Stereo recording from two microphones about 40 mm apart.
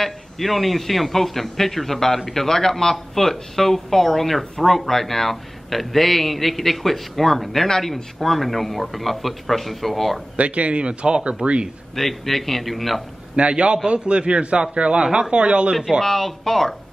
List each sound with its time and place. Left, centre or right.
0.0 s a man's voice: centre
10.3 s a man's voice: right
11.9 s a man's voice: centre
13.4 s a man's voice: right
15.0 s speech: centre
15.3 s a man's voice: right
16.0 s speech: centre